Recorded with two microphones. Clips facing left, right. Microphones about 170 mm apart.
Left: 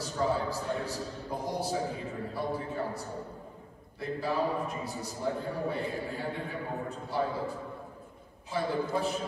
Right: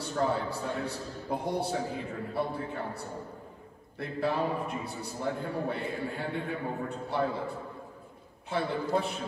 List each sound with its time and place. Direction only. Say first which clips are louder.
0.0 s a man's voice: even; 60° right (ahead or behind)